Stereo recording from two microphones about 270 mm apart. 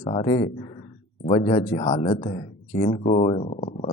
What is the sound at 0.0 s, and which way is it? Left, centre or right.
Speech, left.